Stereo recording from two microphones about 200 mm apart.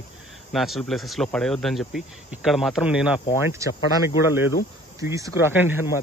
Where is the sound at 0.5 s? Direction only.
Centre (ahead or behind).